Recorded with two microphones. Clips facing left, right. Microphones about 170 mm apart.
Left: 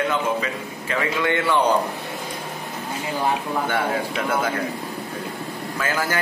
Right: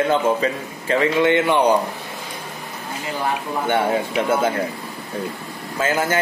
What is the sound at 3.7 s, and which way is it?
Speech, 25° right (ahead or behind).